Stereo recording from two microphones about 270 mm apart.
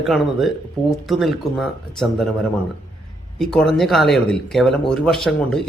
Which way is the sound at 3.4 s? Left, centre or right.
Centre.